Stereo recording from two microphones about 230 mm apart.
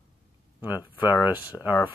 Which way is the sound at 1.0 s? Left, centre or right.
Centre.